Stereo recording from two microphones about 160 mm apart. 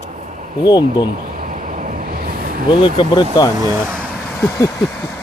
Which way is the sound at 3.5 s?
25° right (ahead or behind).